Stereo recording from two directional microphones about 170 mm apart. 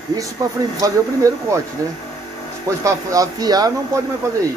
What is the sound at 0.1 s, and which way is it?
Speech, 20° right (ahead or behind).